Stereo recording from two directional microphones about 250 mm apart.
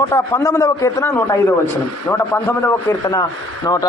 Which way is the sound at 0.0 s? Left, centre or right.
Centre.